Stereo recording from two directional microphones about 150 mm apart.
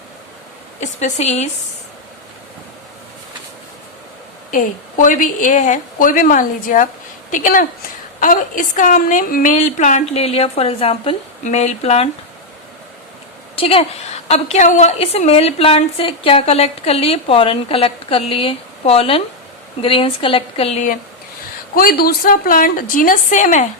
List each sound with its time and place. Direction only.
0.8 s a woman's voice: 50° left (ahead or behind)
4.5 s a woman's voice: 60° left (ahead or behind); by 11.2 s 40° left (ahead or behind)
11.4 s a woman's voice: 50° left (ahead or behind)
13.6 s a woman's voice: 40° left (ahead or behind)
21.8 s a woman's voice: 80° left; by 23.6 s 55° left (ahead or behind)